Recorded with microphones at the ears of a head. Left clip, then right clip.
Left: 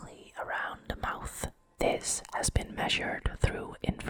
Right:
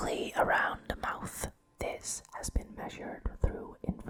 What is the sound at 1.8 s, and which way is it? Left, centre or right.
Whispering, left.